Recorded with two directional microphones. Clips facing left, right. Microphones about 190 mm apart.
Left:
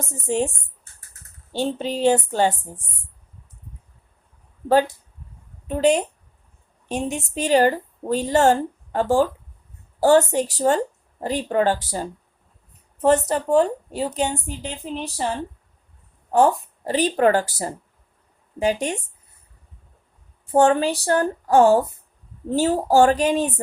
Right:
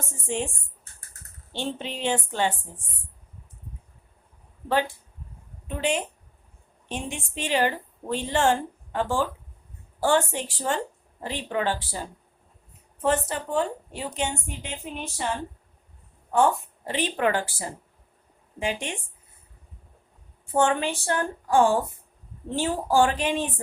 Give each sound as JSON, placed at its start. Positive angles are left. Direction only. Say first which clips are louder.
{"t": 0.1, "sound": "a woman's voice", "louder": "left 7 dB", "side_deg": 40}
{"t": 1.5, "sound": "a woman's voice", "louder": "left 7 dB", "side_deg": 40}
{"t": 5.6, "sound": "a woman's voice", "louder": "left 8 dB", "side_deg": 40}
{"t": 20.5, "sound": "a woman's voice", "louder": "left 6 dB", "side_deg": 35}